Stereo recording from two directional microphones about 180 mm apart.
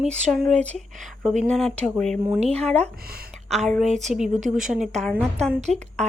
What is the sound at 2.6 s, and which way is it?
Speech, 5° left (ahead or behind).